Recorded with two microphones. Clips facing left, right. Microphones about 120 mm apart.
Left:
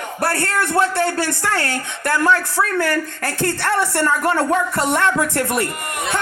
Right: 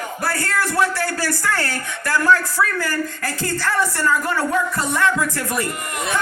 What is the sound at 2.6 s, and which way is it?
Speech, 60° left (ahead or behind).